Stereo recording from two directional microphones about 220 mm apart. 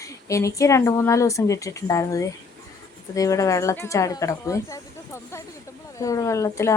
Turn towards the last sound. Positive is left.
turn(degrees=15)  # may be behind; listen again after turning